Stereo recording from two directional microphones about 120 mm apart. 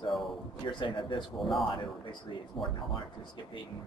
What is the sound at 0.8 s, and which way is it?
Speech, 45° left (ahead or behind).